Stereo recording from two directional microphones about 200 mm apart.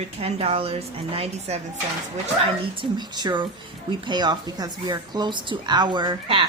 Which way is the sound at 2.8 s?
20° right (ahead or behind).